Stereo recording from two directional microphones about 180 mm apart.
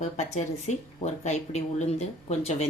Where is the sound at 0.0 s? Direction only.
40° left (ahead or behind).